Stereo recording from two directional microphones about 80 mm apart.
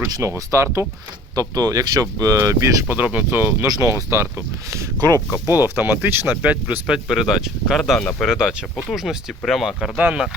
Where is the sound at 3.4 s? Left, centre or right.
Right.